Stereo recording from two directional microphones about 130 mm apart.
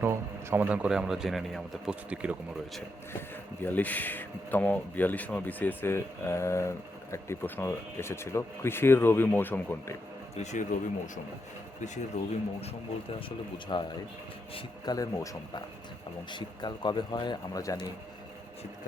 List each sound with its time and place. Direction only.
0.0 s a man's voice: 15° right (ahead or behind); by 2.0 s centre (ahead or behind)
2.0 s speech: 10° right (ahead or behind)
3.1 s speech: 15° left (ahead or behind)
10.3 s speech: 65° left (ahead or behind)
13.1 s a man's voice: 40° left (ahead or behind)
14.8 s a man's voice: 25° left (ahead or behind)